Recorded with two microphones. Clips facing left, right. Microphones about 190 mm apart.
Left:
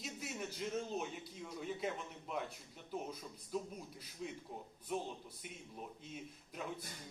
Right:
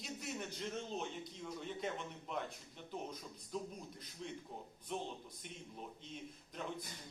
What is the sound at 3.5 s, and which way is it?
A man's voice, 5° left (ahead or behind).